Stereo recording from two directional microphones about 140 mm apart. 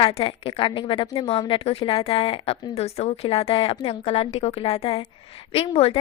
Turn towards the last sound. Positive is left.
turn(degrees=45)  # may be behind; listen again after turning